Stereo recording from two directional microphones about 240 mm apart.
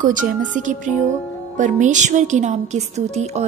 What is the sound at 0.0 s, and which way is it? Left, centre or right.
A woman's voice, right.